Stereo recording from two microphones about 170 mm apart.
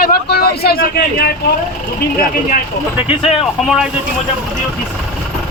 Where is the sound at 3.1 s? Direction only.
35° left (ahead or behind).